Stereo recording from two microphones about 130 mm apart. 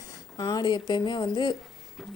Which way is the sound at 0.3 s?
30° left (ahead or behind).